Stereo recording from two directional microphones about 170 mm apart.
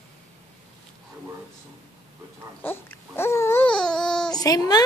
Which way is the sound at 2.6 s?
10° left (ahead or behind).